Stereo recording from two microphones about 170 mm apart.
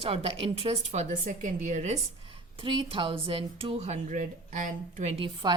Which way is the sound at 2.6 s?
30° right (ahead or behind).